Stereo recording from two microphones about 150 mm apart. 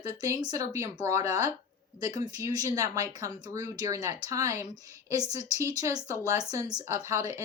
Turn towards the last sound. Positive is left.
turn(degrees=-20)  # may be behind; listen again after turning